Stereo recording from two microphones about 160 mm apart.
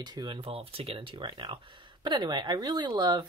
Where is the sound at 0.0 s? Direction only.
25° right (ahead or behind).